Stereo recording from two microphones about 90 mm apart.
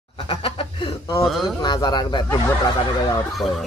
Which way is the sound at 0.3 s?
80° left.